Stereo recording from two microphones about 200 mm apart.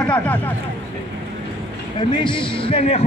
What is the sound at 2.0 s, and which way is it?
Speech, 25° left (ahead or behind).